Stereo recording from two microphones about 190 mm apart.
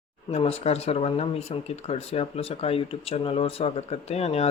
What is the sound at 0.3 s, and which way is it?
Speech, 30° left (ahead or behind).